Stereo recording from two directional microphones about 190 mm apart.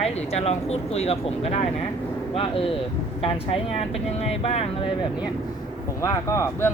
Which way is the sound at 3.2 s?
30° left (ahead or behind).